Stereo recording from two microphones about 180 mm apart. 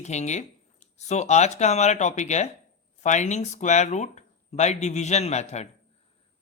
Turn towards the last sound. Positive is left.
turn(degrees=40)  # may be behind; listen again after turning